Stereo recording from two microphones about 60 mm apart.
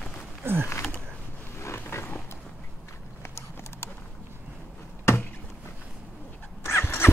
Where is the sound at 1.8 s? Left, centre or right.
Left.